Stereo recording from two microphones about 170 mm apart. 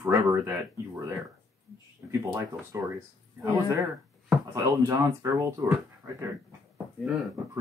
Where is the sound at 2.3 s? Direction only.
20° right (ahead or behind).